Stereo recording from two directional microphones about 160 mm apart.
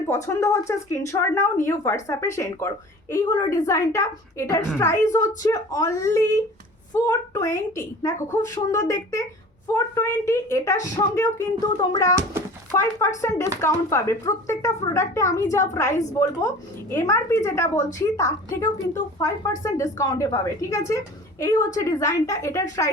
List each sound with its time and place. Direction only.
0.1 s a woman's voice: 15° left (ahead or behind)